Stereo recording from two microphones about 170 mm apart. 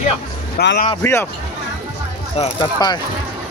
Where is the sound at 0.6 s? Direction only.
70° left (ahead or behind).